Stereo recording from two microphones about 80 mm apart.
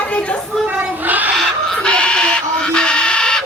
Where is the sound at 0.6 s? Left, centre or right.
Right.